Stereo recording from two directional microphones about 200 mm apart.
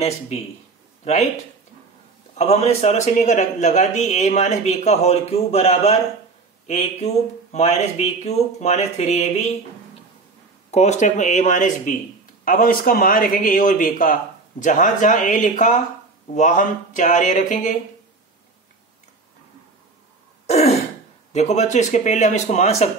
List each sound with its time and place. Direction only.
1.0 s speech: 35° left (ahead or behind)
2.3 s a man's voice: 30° left (ahead or behind)
7.5 s a man's voice: 30° left (ahead or behind)
10.7 s a man's voice: 35° left (ahead or behind)
20.4 s throat clearing: 35° left (ahead or behind)
21.3 s a man's voice: 35° left (ahead or behind)